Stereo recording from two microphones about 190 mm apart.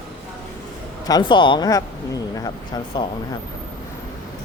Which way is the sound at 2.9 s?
25° left (ahead or behind).